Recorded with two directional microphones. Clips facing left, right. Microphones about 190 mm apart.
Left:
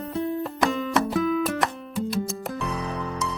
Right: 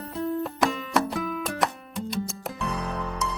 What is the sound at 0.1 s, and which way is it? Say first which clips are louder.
Music: even; centre (ahead or behind).